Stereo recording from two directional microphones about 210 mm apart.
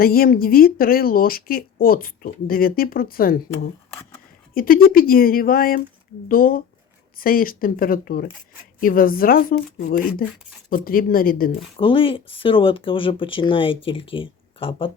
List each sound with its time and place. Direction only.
0.0 s speech: 45° left (ahead or behind)
11.8 s speech: 25° left (ahead or behind)